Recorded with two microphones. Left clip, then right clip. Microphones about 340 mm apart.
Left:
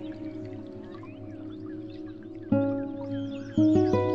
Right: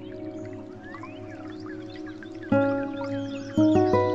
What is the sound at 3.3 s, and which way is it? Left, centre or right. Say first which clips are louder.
Music: right 1 dB; centre.